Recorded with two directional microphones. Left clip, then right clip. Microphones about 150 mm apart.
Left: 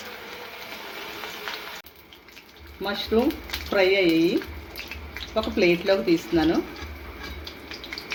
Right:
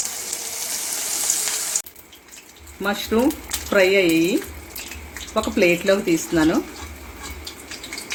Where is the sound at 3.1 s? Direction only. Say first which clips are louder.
Right 1 dB; 60° right (ahead or behind).